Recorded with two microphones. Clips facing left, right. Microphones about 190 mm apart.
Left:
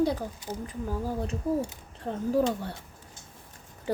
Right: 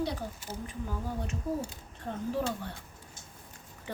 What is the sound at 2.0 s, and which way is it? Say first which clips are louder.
Speech: left 7 dB; 40° left (ahead or behind).